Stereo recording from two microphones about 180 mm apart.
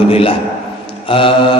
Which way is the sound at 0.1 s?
30° left (ahead or behind).